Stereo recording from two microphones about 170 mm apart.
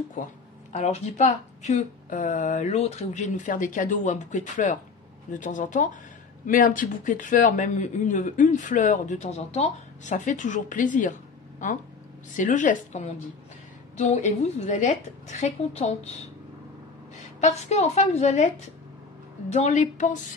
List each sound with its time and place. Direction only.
0.7 s a woman's voice: 40° left (ahead or behind)
17.4 s a woman's voice: 40° left (ahead or behind)
19.5 s speech: 40° left (ahead or behind)